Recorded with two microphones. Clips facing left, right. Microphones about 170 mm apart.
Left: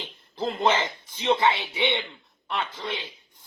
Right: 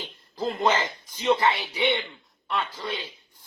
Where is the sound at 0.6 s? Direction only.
25° left (ahead or behind).